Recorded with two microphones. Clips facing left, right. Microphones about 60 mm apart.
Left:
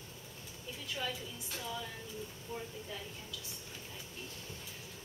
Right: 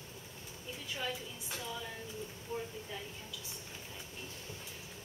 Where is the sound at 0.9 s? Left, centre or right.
Centre.